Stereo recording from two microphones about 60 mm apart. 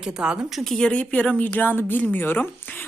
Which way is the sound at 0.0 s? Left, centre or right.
Centre.